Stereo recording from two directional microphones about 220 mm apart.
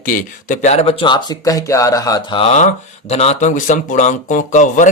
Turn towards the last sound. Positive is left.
turn(degrees=35)  # may be behind; listen again after turning